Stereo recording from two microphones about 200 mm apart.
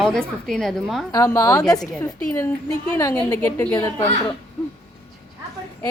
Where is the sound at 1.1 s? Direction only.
15° left (ahead or behind).